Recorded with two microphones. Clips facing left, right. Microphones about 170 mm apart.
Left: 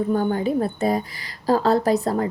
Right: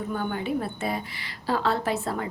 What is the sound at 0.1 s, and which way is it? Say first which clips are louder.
A woman's voice: left 4 dB; 40° left (ahead or behind).